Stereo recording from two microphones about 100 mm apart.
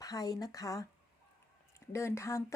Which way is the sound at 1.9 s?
30° left (ahead or behind).